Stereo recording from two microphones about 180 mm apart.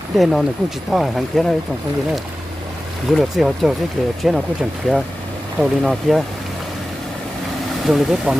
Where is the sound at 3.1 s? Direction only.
Centre (ahead or behind).